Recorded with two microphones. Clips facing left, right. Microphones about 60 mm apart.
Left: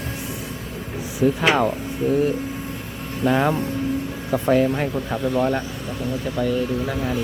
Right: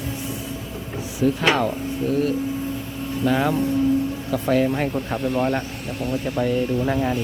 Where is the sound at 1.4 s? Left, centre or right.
Centre.